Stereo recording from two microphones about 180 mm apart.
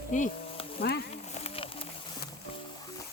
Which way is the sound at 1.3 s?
35° left (ahead or behind).